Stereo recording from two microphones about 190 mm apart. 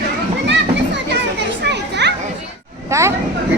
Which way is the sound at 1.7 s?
65° right (ahead or behind).